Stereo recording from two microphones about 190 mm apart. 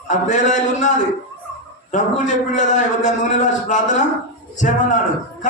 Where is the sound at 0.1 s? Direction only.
40° left (ahead or behind).